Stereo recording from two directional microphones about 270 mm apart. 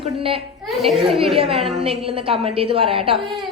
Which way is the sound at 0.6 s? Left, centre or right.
Centre.